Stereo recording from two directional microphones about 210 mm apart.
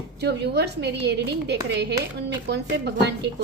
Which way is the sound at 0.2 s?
55° right (ahead or behind).